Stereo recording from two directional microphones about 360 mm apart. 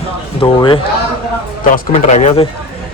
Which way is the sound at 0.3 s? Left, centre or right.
Centre.